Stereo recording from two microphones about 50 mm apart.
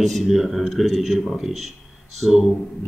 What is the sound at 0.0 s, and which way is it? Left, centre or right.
Speech, centre.